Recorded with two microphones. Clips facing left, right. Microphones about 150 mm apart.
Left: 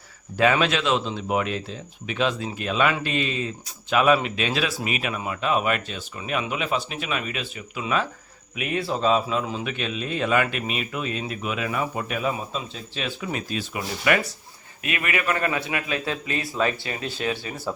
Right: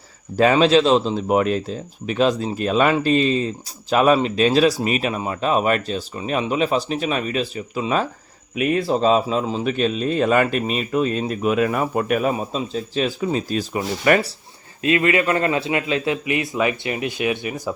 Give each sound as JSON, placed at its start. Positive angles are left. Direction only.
{"t": 0.3, "sound": "speech", "side_deg": -35}
{"t": 12.5, "sound": "a man's voice", "side_deg": -40}